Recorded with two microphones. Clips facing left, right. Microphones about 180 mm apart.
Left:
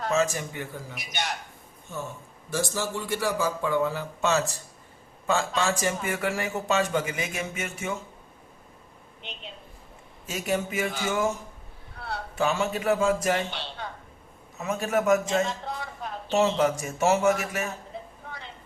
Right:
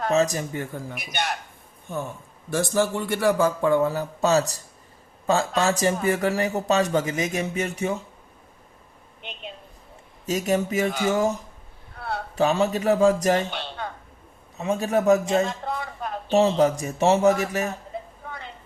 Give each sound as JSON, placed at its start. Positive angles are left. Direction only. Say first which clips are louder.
{"t": 0.1, "sound": "a man's voice", "louder": "right 3 dB", "side_deg": -40}
{"t": 10.2, "sound": "a man's voice", "louder": "right 5 dB", "side_deg": -40}
{"t": 12.4, "sound": "a man's voice", "louder": "right 5 dB", "side_deg": -35}
{"t": 14.6, "sound": "a man's voice", "louder": "right 4 dB", "side_deg": -30}
{"t": 15.4, "sound": "a sound", "louder": "right 3 dB", "side_deg": -55}
{"t": 16.3, "sound": "a man's voice", "louder": "right 4 dB", "side_deg": -35}